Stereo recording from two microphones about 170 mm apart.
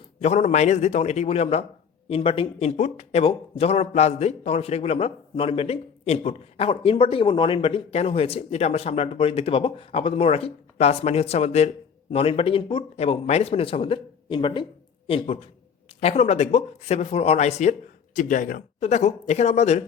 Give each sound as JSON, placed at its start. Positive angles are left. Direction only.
{"t": 0.2, "sound": "speech", "side_deg": 40}
{"t": 18.8, "sound": "speech", "side_deg": 40}